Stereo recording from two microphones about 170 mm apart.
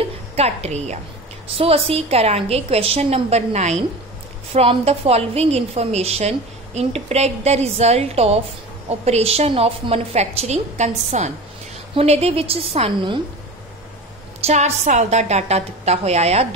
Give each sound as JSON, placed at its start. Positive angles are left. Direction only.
{"t": 0.0, "sound": "a woman's voice", "side_deg": -40}
{"t": 14.4, "sound": "a woman's voice", "side_deg": -40}